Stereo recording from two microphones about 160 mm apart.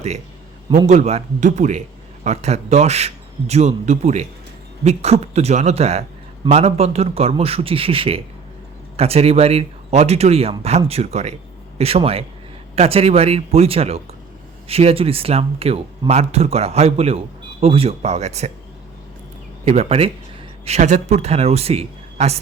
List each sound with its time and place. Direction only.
0.9 s a man's voice: 45° right (ahead or behind)
19.6 s speech: 40° right (ahead or behind)